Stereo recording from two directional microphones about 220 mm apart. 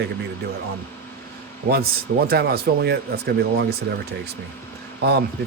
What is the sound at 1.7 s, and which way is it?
Speech, 45° right (ahead or behind).